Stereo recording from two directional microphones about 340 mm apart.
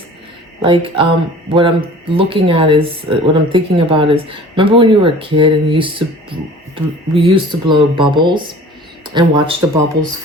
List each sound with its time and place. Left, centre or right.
0.6 s speech: centre